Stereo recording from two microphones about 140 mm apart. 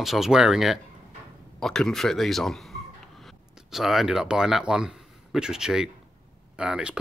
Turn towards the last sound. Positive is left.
turn(degrees=-5)  # may be behind; listen again after turning